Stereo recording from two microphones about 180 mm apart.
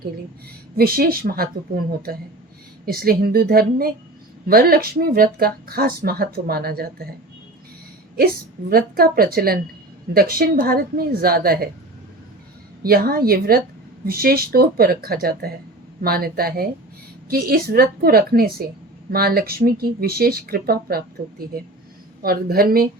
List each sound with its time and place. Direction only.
0.8 s speech: 55° right (ahead or behind)
8.7 s speech: 55° right (ahead or behind)
12.8 s speech: 55° right (ahead or behind)